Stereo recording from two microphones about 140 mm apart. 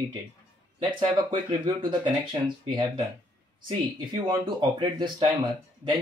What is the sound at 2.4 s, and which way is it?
Speech, 30° right (ahead or behind).